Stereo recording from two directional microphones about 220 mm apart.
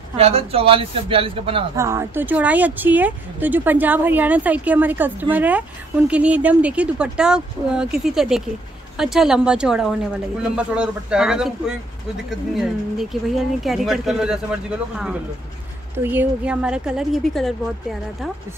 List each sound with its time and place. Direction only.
0.2 s speech: 25° right (ahead or behind)
1.8 s a woman's voice: 10° right (ahead or behind)
13.1 s a woman's voice: centre (ahead or behind)